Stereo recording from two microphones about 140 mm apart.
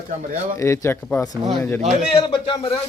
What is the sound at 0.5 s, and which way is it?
Speech, 20° left (ahead or behind).